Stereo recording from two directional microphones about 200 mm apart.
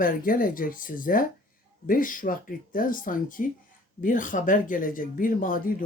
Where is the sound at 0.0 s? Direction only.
45° left (ahead or behind).